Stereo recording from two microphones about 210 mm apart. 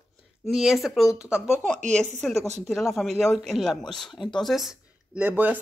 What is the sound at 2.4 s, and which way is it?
Speech, 30° right (ahead or behind).